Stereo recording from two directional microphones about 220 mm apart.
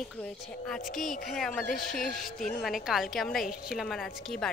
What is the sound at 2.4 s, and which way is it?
Speech, 40° left (ahead or behind).